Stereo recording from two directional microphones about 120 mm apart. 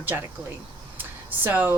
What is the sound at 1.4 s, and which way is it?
Speech, 15° right (ahead or behind).